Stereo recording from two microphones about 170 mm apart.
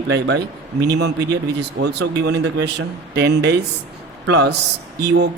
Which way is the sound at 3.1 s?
75° right (ahead or behind).